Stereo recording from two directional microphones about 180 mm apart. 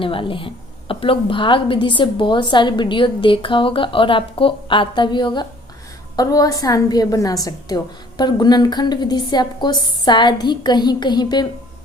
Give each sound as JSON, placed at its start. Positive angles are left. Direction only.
{"t": 0.0, "sound": "a woman's voice", "side_deg": 30}